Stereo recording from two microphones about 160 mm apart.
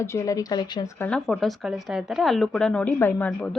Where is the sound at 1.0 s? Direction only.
5° left (ahead or behind).